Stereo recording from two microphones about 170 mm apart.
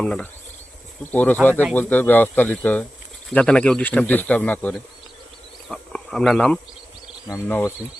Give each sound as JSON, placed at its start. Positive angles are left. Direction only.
{"t": 0.0, "sound": "cricket", "side_deg": 5}
{"t": 1.1, "sound": "speech", "side_deg": 10}
{"t": 5.6, "sound": "insect", "side_deg": 5}
{"t": 7.3, "sound": "speech", "side_deg": 15}